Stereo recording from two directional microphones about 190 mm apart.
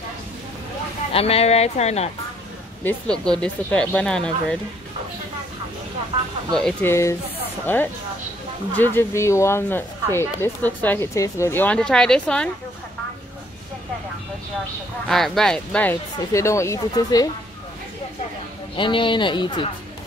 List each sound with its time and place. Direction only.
1.1 s speech: 30° left (ahead or behind)
2.8 s speech: 5° left (ahead or behind)
6.5 s speech: 5° left (ahead or behind)
15.0 s speech: centre (ahead or behind); by 17.3 s 20° left (ahead or behind)
18.8 s speech: 25° left (ahead or behind)